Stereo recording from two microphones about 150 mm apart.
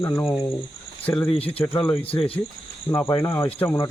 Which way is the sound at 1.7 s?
10° left (ahead or behind).